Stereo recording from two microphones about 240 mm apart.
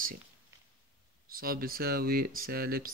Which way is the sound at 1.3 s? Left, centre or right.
Right.